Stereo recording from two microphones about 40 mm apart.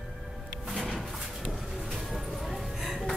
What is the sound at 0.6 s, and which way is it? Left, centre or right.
Music, centre.